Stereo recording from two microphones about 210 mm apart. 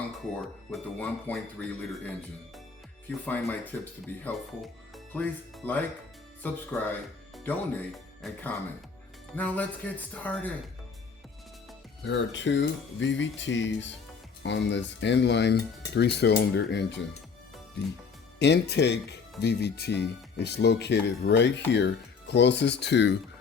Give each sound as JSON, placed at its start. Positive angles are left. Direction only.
{"t": 0.7, "sound": "speech", "side_deg": 5}
{"t": 3.2, "sound": "speech", "side_deg": 5}
{"t": 12.0, "sound": "speech", "side_deg": 60}
{"t": 18.3, "sound": "speech", "side_deg": 55}